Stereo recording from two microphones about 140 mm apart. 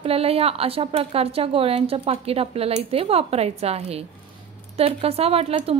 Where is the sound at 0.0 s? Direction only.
45° right (ahead or behind).